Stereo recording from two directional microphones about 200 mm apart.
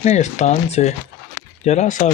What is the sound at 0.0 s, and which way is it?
Speech, 35° left (ahead or behind).